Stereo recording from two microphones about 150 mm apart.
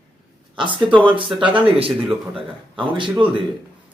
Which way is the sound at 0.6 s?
35° right (ahead or behind).